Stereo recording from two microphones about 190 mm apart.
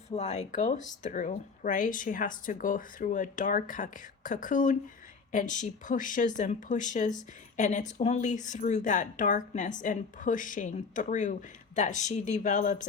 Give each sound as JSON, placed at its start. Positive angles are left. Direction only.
{"t": 0.1, "sound": "a woman's voice", "side_deg": 35}